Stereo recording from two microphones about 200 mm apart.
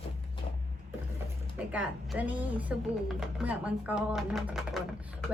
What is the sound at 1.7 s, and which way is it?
A woman's voice, 5° right (ahead or behind).